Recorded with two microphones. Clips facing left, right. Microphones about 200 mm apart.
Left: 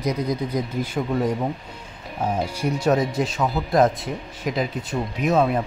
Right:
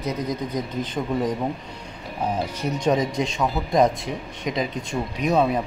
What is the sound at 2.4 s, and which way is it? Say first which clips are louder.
Speech: left 2 dB; 10° left (ahead or behind).